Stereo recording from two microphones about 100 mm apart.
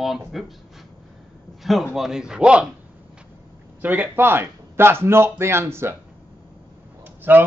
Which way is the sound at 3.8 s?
15° right (ahead or behind).